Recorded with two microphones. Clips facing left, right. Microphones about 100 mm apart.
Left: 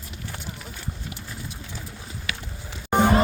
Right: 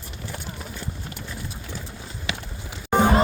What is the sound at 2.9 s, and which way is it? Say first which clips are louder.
Music: even; 10° right (ahead or behind).